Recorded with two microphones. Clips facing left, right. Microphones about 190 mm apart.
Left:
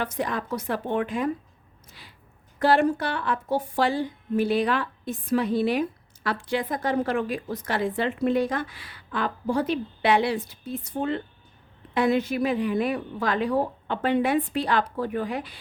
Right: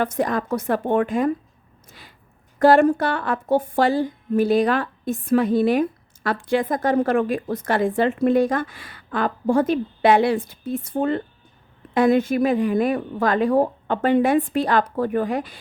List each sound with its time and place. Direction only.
0.0 s a woman's voice: 45° right (ahead or behind)
1.9 s a sound: 50° right (ahead or behind)
2.6 s a woman's voice: 45° right (ahead or behind)